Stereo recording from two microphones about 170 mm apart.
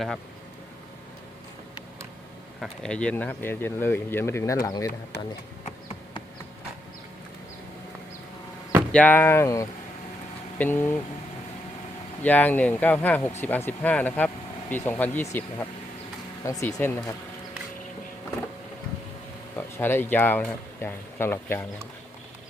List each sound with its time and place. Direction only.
2.6 s speech: 5° left (ahead or behind); by 4.9 s 20° left (ahead or behind)
8.9 s speech: 10° left (ahead or behind)
12.2 s speech: 10° left (ahead or behind)
19.5 s speech: 10° left (ahead or behind)